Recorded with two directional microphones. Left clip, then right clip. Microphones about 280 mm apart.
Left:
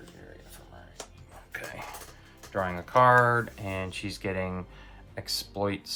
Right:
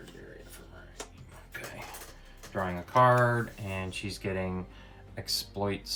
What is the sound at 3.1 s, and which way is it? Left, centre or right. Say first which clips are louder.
Speech: left 5 dB; centre.